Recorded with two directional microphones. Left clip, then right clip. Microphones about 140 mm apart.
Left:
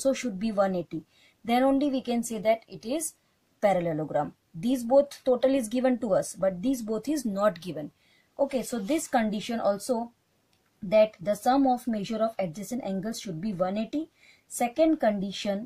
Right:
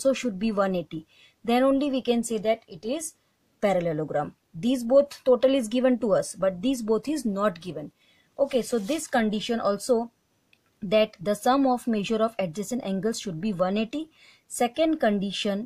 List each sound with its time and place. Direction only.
0.0 s speech: 45° right (ahead or behind)
8.4 s speech: 45° right (ahead or behind)